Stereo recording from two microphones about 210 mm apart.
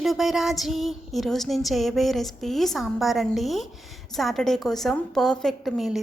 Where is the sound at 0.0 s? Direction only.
Centre (ahead or behind).